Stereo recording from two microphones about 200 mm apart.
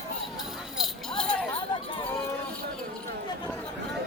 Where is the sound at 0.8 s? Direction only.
5° left (ahead or behind).